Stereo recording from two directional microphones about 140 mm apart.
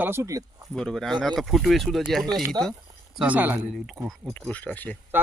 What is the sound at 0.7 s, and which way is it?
Speech, 5° left (ahead or behind).